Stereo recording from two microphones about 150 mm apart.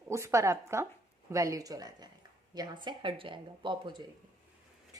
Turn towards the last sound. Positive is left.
turn(degrees=-30)  # may be behind; listen again after turning